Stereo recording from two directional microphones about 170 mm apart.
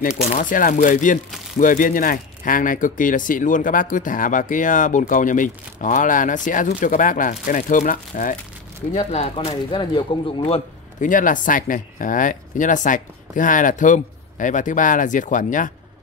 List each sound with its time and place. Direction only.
0.2 s speech: 45° left (ahead or behind)
8.9 s speech: 40° left (ahead or behind)
11.1 s speech: 50° left (ahead or behind)